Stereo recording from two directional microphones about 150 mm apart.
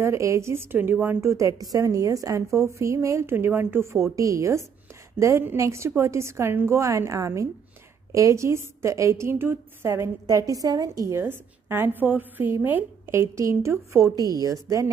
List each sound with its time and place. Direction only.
0.0 s a woman's voice: 20° right (ahead or behind)